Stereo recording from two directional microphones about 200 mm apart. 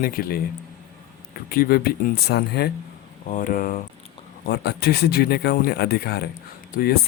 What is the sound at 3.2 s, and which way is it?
Speech, 40° left (ahead or behind).